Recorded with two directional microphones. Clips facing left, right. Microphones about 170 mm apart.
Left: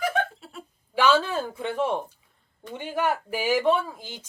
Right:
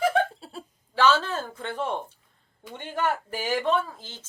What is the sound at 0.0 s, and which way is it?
Giggle, 30° right (ahead or behind).